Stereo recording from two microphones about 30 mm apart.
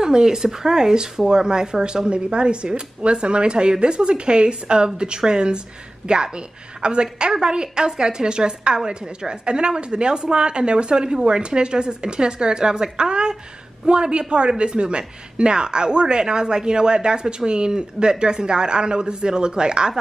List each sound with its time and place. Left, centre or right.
0.0 s a woman's voice: right